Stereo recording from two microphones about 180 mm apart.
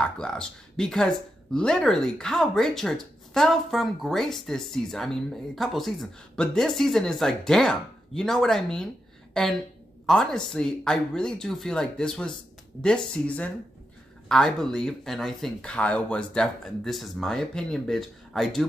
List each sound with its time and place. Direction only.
0.0 s speech: 5° left (ahead or behind)